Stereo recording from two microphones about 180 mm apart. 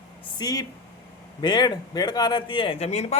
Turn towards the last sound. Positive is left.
turn(degrees=35)  # may be behind; listen again after turning